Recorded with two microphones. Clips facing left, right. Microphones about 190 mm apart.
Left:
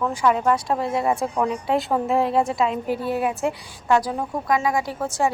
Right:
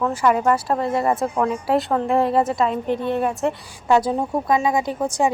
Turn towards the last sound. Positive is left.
turn(degrees=-15)  # may be behind; listen again after turning